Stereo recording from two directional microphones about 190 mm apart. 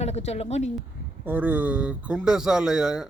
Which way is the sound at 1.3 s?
10° right (ahead or behind).